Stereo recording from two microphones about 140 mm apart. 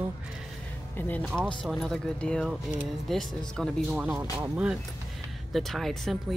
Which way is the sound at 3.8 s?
10° right (ahead or behind).